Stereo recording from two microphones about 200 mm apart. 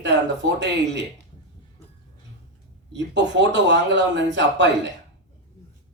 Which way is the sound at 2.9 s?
60° right (ahead or behind).